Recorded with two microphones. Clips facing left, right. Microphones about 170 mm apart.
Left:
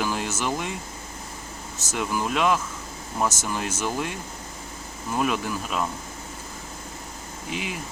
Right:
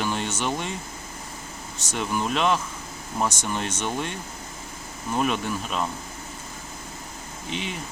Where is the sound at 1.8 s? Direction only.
5° left (ahead or behind).